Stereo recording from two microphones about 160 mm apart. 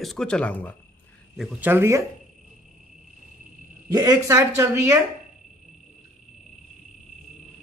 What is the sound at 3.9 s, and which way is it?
A man's voice, 25° right (ahead or behind).